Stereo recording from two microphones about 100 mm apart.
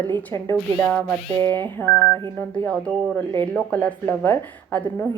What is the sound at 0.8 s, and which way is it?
Speech, 15° left (ahead or behind).